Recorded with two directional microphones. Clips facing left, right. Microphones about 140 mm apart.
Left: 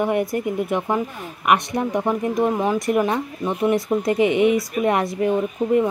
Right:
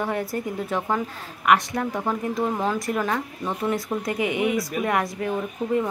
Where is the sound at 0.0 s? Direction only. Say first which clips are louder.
Left 6 dB; 15° left (ahead or behind).